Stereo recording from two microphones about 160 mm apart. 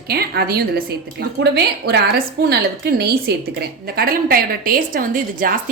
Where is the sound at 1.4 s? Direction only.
90° right.